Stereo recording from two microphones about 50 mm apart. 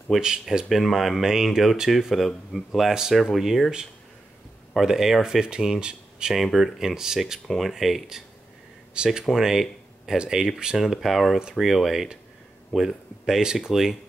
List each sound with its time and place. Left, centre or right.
0.2 s speech: centre
0.7 s speech: centre
4.7 s speech: centre
6.3 s speech: centre
8.9 s speech: centre
10.8 s speech: centre